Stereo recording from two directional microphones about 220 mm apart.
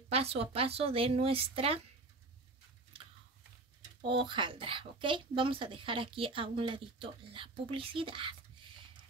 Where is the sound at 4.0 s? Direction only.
25° right (ahead or behind).